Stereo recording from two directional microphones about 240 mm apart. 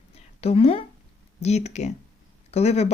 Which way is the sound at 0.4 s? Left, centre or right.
Left.